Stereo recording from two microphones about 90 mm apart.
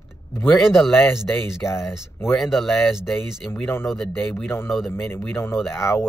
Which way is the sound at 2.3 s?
Centre (ahead or behind).